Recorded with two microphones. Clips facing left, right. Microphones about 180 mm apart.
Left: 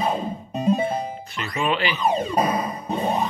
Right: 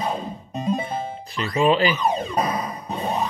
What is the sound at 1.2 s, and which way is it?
Speech, 35° right (ahead or behind).